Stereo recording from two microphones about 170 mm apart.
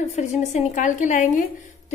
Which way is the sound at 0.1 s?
40° left (ahead or behind).